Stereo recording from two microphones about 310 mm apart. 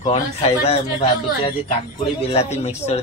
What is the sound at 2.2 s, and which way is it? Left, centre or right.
Speech, centre.